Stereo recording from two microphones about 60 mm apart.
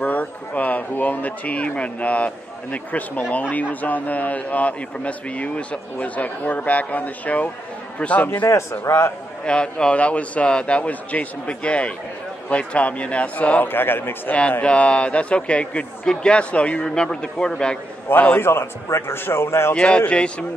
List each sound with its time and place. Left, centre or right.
0.0 s speech: left
8.9 s a man's voice: left
9.4 s speech: centre; by 14.3 s left
14.6 s a man's voice: centre
18.3 s a man's voice: left
19.7 s a man's voice: centre